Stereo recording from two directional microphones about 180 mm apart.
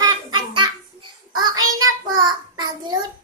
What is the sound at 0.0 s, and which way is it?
Child singing, 25° right (ahead or behind).